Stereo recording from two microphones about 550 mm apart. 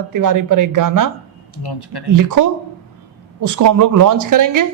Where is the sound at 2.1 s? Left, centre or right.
Right.